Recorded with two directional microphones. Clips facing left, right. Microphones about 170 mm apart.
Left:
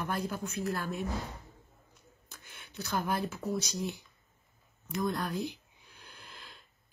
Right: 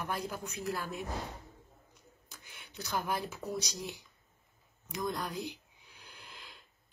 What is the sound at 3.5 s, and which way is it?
Speech, 15° right (ahead or behind).